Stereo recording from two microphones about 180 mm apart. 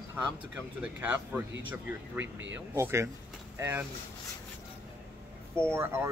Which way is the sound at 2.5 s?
15° right (ahead or behind).